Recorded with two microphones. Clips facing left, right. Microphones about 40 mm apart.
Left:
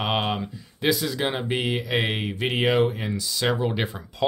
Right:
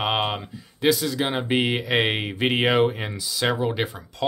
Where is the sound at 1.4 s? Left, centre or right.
Right.